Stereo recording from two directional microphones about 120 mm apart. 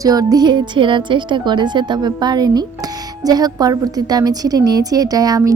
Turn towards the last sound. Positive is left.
turn(degrees=-30)  # may be behind; listen again after turning